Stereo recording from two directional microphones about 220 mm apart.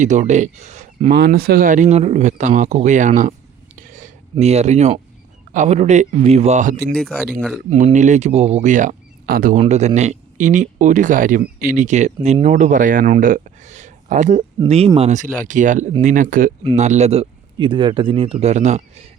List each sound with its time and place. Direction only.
0.0 s speech: 35° right (ahead or behind)
1.1 s speech: 45° right (ahead or behind)
3.8 s a sound: 35° right (ahead or behind)
5.5 s speech: 30° right (ahead or behind)
6.9 s speech: 5° left (ahead or behind)
7.7 s speech: 35° right (ahead or behind)
9.6 s speech: 30° right (ahead or behind)
14.6 s speech: 25° right (ahead or behind)